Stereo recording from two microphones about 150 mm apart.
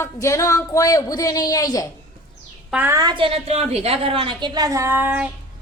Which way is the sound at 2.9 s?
30° right (ahead or behind).